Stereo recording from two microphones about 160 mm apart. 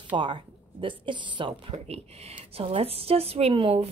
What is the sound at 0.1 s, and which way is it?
A woman's voice, 30° right (ahead or behind).